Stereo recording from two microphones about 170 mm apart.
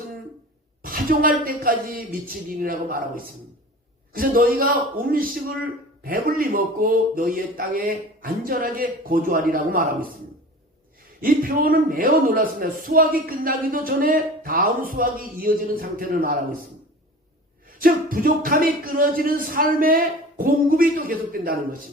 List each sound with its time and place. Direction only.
0.8 s speech: 55° right (ahead or behind)
11.2 s speech: 60° right (ahead or behind)
17.7 s speech: 55° right (ahead or behind)